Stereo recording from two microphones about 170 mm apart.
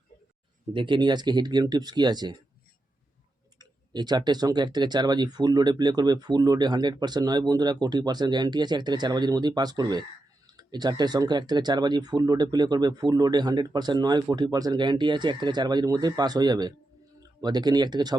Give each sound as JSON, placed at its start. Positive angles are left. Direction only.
{"t": 0.7, "sound": "speech", "side_deg": -30}
{"t": 3.6, "sound": "speech", "side_deg": -25}